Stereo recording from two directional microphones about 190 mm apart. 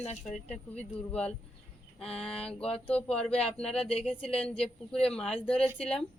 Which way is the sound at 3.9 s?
30° left (ahead or behind).